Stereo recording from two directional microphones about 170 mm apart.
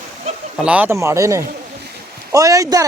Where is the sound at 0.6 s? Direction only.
10° right (ahead or behind).